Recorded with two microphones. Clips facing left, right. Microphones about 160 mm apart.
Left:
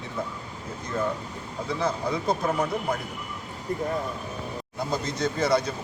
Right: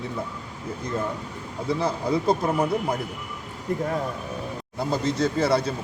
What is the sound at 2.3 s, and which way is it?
Speech, 30° right (ahead or behind).